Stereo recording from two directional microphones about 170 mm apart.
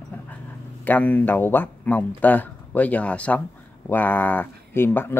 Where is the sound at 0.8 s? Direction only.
10° left (ahead or behind).